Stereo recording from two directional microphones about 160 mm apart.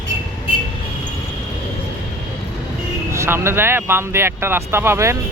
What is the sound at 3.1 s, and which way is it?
Speech, 15° right (ahead or behind).